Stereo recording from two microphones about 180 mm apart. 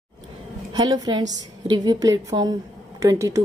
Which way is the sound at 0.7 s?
20° right (ahead or behind).